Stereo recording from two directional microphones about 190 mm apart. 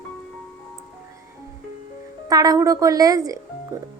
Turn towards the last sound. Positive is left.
turn(degrees=-20)  # may be behind; listen again after turning